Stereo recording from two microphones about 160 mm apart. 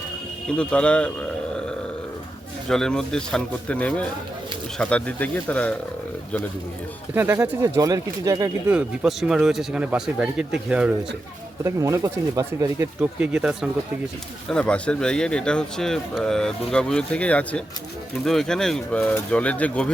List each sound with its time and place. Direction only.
0.5 s speech: 5° left (ahead or behind)
2.6 s a man's voice: 5° left (ahead or behind)
7.1 s speech: 15° right (ahead or behind)
8.7 s speech: 5° right (ahead or behind)
11.6 s speech: 20° right (ahead or behind)
13.0 s a man's voice: 5° right (ahead or behind)
14.5 s a man's voice: 5° left (ahead or behind)